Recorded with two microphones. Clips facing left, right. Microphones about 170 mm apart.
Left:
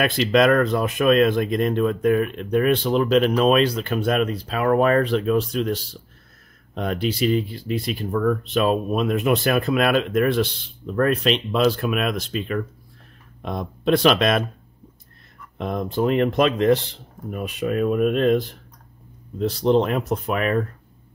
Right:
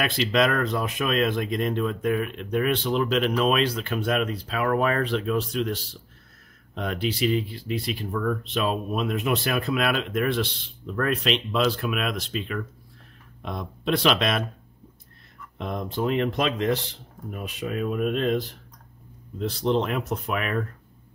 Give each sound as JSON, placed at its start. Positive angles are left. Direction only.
{"t": 0.0, "sound": "speech", "side_deg": 50}
{"t": 15.5, "sound": "speech", "side_deg": 50}
{"t": 19.4, "sound": "speech", "side_deg": 40}